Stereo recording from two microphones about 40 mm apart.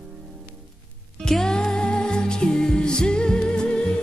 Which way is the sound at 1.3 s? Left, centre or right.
Centre.